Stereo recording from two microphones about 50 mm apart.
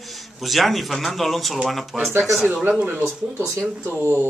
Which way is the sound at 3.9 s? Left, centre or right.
Right.